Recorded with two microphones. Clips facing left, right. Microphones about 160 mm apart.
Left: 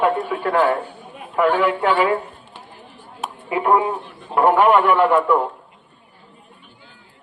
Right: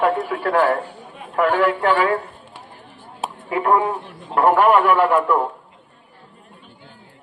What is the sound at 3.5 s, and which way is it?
Speech, 5° left (ahead or behind).